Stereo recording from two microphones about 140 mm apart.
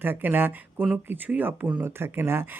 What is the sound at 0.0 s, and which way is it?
Speech, 15° right (ahead or behind).